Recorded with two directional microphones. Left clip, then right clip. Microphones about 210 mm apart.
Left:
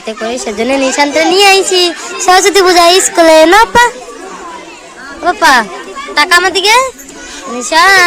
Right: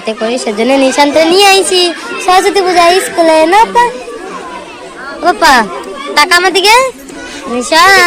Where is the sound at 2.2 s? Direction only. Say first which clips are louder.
Left 2 dB; 30° left (ahead or behind).